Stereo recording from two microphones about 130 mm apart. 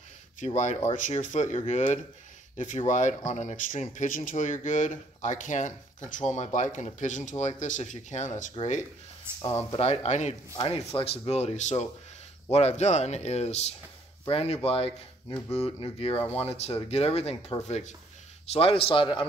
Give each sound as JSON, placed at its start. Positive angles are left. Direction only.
{"t": 0.6, "sound": "a man's voice", "side_deg": 65}
{"t": 2.5, "sound": "speech", "side_deg": 75}
{"t": 9.3, "sound": "speech", "side_deg": -20}
{"t": 9.8, "sound": "a man's voice", "side_deg": 55}
{"t": 10.8, "sound": "a man's voice", "side_deg": 50}
{"t": 18.5, "sound": "speech", "side_deg": 45}